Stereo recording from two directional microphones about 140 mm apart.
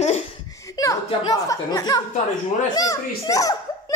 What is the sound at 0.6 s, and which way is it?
A child's voice, 25° left (ahead or behind).